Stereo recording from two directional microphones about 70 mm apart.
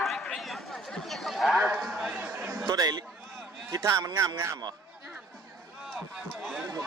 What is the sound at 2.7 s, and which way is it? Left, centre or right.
Speech, right.